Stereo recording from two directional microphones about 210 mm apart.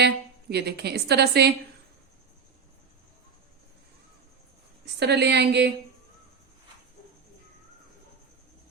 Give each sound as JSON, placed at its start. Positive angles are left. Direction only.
{"t": 0.0, "sound": "a woman's voice", "side_deg": -50}
{"t": 4.9, "sound": "a woman's voice", "side_deg": -55}